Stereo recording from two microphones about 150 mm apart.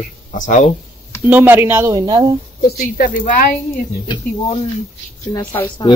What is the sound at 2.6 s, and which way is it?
Speech, 70° left (ahead or behind).